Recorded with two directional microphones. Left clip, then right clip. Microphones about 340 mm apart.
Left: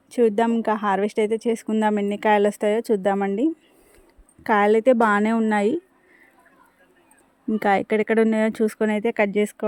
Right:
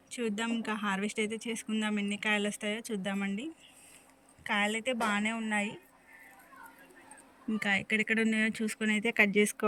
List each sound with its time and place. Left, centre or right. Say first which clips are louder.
0.1 s a woman's voice: left 16 dB; centre
7.6 s a woman's voice: left 10 dB; centre